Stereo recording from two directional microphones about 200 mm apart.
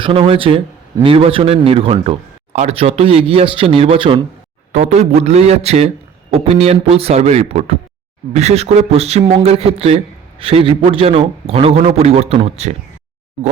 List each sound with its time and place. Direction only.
0.0 s speech: 25° right (ahead or behind)
4.7 s a man's voice: 35° right (ahead or behind)